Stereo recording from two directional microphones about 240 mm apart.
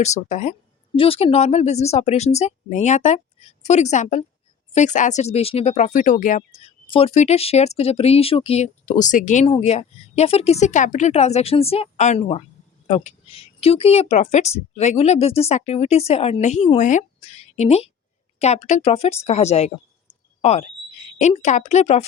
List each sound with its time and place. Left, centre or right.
0.0 s speech: left